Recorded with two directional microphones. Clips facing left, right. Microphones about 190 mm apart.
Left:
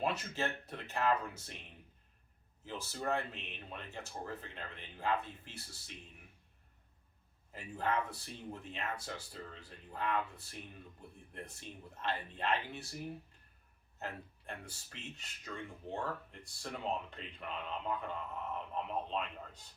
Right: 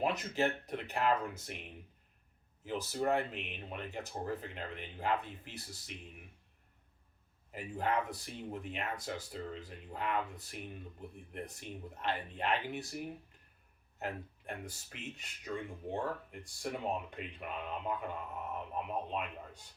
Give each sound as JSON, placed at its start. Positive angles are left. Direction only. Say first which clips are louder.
{"t": 0.0, "sound": "speech", "louder": "right 4 dB", "side_deg": -15}
{"t": 2.6, "sound": "speech", "louder": "right 5 dB", "side_deg": -15}
{"t": 7.5, "sound": "speech", "louder": "right 2 dB", "side_deg": -15}
{"t": 14.0, "sound": "speech", "louder": "right 4 dB", "side_deg": -15}